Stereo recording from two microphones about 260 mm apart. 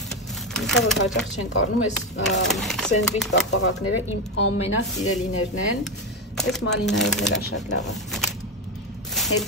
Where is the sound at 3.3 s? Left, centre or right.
Left.